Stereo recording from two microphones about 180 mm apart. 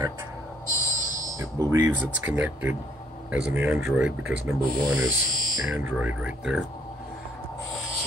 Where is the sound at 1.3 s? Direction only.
15° right (ahead or behind).